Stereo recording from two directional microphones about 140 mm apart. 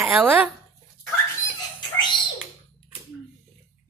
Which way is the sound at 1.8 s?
35° left (ahead or behind).